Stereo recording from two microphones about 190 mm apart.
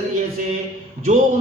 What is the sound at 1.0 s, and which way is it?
Speech, 40° right (ahead or behind).